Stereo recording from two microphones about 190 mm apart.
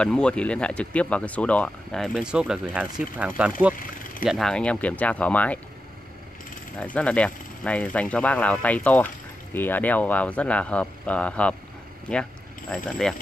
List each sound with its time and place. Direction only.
0.0 s speech: 5° left (ahead or behind)
4.3 s speech: centre (ahead or behind)
6.8 s speech: 5° left (ahead or behind)